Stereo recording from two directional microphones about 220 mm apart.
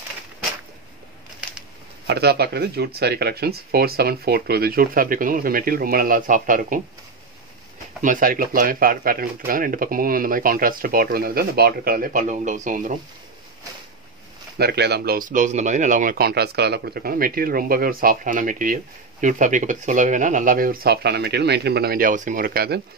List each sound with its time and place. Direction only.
2.0 s speech: 45° right (ahead or behind)
8.0 s speech: 35° right (ahead or behind)
14.6 s speech: 50° right (ahead or behind)